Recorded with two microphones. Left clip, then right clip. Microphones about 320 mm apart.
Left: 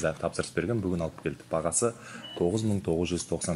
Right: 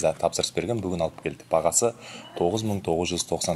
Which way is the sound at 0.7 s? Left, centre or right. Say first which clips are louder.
Right 4 dB; right.